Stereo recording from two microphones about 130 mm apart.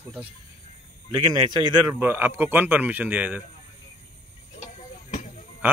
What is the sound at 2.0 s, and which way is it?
A man's voice, 15° right (ahead or behind).